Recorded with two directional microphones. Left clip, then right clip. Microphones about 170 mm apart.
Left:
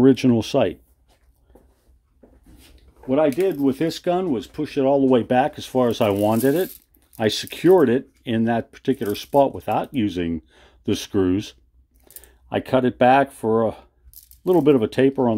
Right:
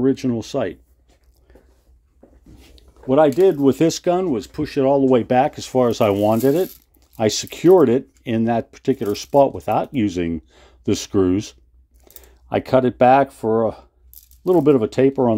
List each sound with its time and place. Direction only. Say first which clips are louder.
0.0 s speech: left 4 dB; 20° left (ahead or behind)
2.7 s speech: right 4 dB; 55° right (ahead or behind)
3.8 s speech: right 4 dB; 20° right (ahead or behind)